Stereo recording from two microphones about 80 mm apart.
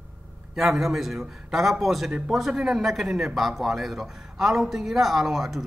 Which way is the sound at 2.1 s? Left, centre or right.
Centre.